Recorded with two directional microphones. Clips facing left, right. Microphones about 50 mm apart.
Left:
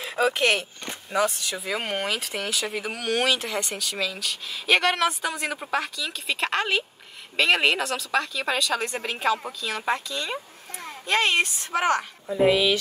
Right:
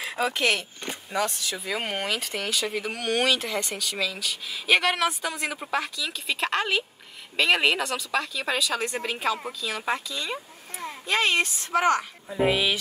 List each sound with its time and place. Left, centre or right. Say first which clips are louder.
0.0 s a sound: left 3 dB; centre
0.3 s speech: left 2 dB; centre
12.4 s speech: left 3 dB; centre